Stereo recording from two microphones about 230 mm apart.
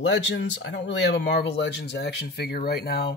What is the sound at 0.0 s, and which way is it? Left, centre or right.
Speech, left.